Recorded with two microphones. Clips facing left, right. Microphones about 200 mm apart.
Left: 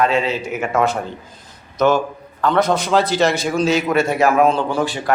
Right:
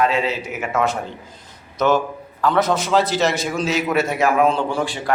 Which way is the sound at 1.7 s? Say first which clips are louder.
Left 2 dB; centre (ahead or behind).